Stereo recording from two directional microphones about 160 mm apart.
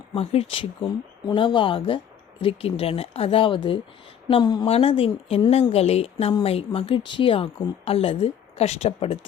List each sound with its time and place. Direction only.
0.1 s a woman's voice: 35° left (ahead or behind)